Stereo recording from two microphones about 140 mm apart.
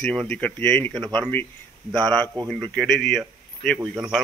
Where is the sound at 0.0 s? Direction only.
5° left (ahead or behind).